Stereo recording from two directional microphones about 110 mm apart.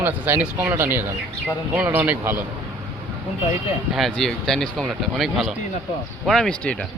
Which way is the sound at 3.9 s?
Centre (ahead or behind).